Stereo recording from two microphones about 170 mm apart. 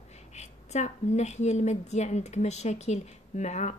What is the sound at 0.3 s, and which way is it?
A woman's voice, 40° left (ahead or behind).